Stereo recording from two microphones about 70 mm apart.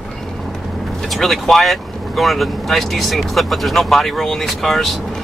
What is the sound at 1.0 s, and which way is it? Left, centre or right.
Speech, centre.